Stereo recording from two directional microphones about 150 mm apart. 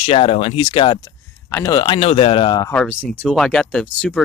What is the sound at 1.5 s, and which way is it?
Speech, 20° left (ahead or behind).